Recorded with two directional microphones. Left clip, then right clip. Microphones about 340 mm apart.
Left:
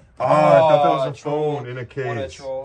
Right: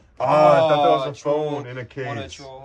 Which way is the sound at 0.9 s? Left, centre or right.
Centre.